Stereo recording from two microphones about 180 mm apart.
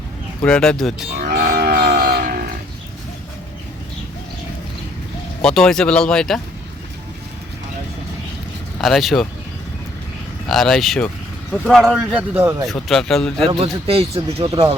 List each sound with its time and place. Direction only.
0.4 s speech: 5° left (ahead or behind)
1.3 s a sound: 50° right (ahead or behind)
5.4 s speech: 5° left (ahead or behind)
8.8 s speech: centre (ahead or behind)
10.5 s speech: centre (ahead or behind)
12.6 s speech: centre (ahead or behind)
13.5 s speech: 30° right (ahead or behind)